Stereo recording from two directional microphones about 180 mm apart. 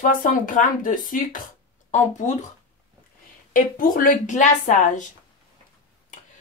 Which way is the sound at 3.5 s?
50° left (ahead or behind).